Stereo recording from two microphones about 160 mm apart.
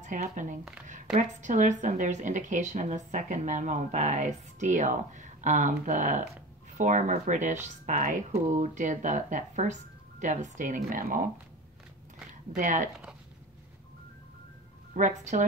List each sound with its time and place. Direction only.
0.0 s a woman's voice: 50° right (ahead or behind)
12.5 s a woman's voice: 50° right (ahead or behind)
15.0 s a woman's voice: 50° right (ahead or behind)